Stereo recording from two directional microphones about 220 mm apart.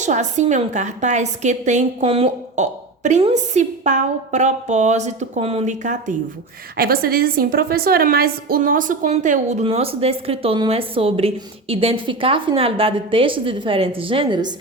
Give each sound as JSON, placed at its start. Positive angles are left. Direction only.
{"t": 0.0, "sound": "a woman's voice", "side_deg": -35}